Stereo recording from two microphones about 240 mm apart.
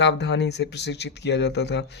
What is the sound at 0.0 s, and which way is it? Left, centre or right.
Speech, left.